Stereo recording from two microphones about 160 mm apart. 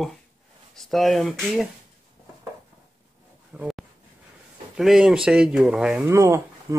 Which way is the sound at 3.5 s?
Centre (ahead or behind).